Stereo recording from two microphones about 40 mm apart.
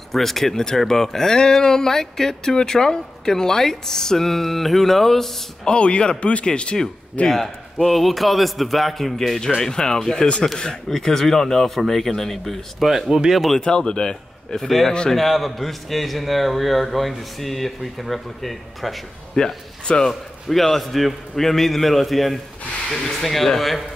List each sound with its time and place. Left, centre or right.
0.1 s speech: centre
5.7 s a man's voice: left
7.2 s a man's voice: centre
9.6 s speech: centre
12.7 s a man's voice: centre
13.6 s a man's voice: left
14.5 s a man's voice: centre
14.9 s speech: centre
15.1 s a man's voice: centre
19.3 s speech: centre
20.1 s a man's voice: centre